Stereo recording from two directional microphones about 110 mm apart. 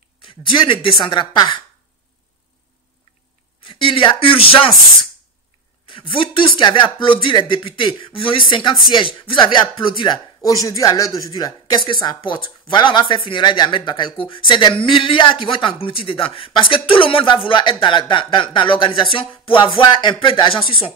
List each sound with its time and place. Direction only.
0.2 s speech: 50° left (ahead or behind)
3.6 s speech: 50° left (ahead or behind)
5.9 s speech: 50° left (ahead or behind)
10.4 s speech: 30° left (ahead or behind); by 20.8 s 55° left (ahead or behind)